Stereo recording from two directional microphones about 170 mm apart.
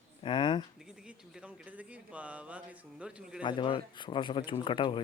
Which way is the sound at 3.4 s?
30° left (ahead or behind).